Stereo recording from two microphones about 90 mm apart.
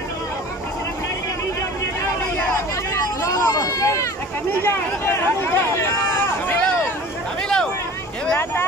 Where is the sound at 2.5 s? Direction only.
30° left (ahead or behind).